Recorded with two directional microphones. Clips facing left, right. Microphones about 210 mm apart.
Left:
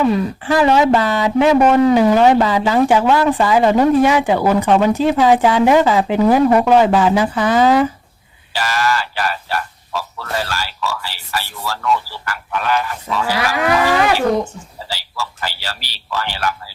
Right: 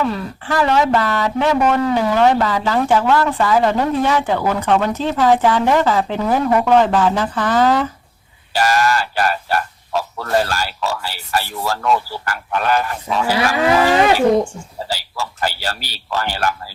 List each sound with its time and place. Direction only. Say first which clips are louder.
0.0 s speech: left 5 dB; 15° left (ahead or behind)
8.5 s a sound: right 3 dB; 45° right (ahead or behind)
10.2 s speech: right 6 dB; 45° right (ahead or behind)
13.6 s speech: right 1 dB; 30° right (ahead or behind)
14.8 s speech: right 1 dB; 45° right (ahead or behind)